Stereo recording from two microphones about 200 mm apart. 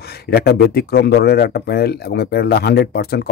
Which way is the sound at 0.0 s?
50° left (ahead or behind).